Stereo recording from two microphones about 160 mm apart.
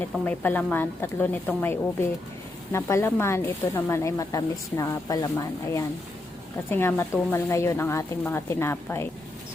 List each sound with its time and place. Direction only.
0.3 s speech: 10° left (ahead or behind)